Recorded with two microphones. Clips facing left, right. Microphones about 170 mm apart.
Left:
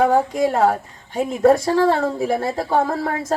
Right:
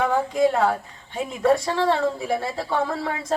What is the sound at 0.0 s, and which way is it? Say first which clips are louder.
A woman's voice: left 3 dB; 40° left (ahead or behind).